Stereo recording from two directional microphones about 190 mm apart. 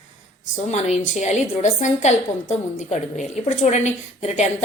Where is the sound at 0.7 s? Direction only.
35° left (ahead or behind).